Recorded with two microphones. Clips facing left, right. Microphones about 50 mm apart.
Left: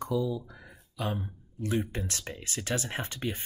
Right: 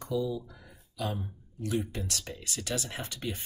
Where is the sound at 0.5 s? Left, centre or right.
Left.